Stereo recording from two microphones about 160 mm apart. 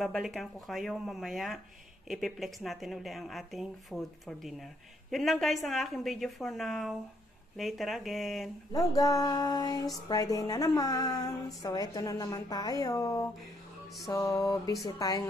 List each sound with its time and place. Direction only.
0.0 s speech: centre (ahead or behind)
8.7 s speech: 20° left (ahead or behind)